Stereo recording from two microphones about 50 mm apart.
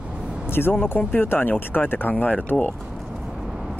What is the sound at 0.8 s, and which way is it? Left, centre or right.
Speech, left.